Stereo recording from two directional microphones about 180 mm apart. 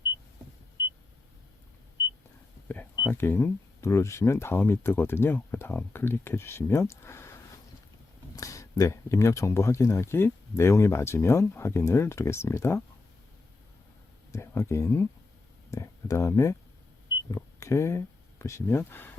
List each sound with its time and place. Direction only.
3.0 s speech: 10° left (ahead or behind)
8.4 s speech: 20° left (ahead or behind)
14.3 s speech: 15° left (ahead or behind)